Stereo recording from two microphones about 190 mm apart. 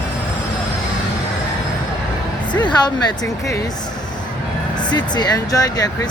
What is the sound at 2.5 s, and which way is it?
Music, 20° left (ahead or behind).